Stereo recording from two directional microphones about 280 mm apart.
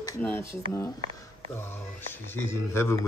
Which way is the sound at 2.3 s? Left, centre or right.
Centre.